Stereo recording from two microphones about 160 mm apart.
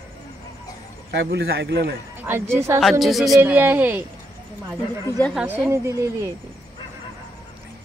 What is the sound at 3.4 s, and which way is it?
Speech, 15° right (ahead or behind).